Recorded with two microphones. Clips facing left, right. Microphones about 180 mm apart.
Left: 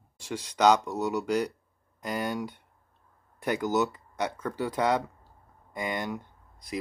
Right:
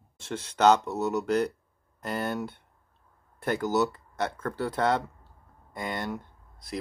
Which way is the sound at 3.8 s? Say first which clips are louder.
Right 1 dB; 15° left (ahead or behind).